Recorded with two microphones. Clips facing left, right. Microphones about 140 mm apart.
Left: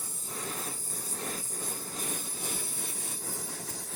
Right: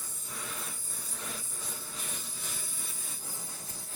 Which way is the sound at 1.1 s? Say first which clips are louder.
Left 4 dB; 45° left (ahead or behind).